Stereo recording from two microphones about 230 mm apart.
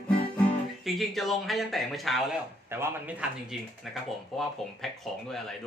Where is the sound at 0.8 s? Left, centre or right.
Centre.